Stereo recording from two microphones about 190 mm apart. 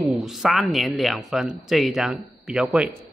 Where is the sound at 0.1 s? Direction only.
Centre (ahead or behind).